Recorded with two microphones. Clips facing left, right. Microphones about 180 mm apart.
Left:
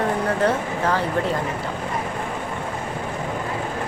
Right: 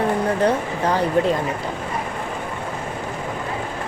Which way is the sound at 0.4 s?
15° right (ahead or behind).